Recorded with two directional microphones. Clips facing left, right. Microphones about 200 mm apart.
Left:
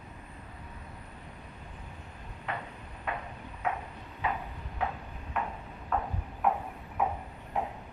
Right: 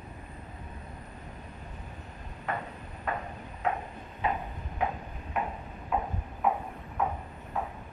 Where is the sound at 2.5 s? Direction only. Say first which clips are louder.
Right 3 dB; 45° right (ahead or behind).